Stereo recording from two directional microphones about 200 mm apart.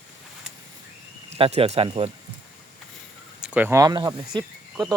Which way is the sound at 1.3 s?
30° right (ahead or behind).